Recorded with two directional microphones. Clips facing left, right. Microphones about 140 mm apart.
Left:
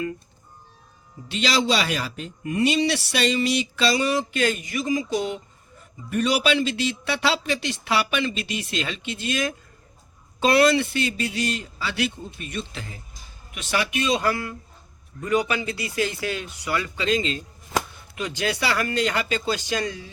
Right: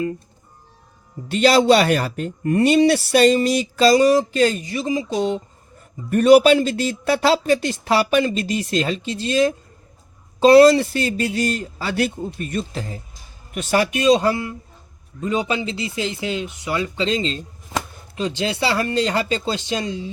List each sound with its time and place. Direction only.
1.3 s speech: 50° right (ahead or behind); by 5.4 s 30° right (ahead or behind)
6.1 s speech: 50° right (ahead or behind)
14.2 s speech: 25° right (ahead or behind)